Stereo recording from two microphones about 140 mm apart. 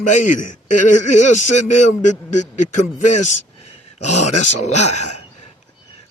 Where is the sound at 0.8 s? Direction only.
60° left (ahead or behind).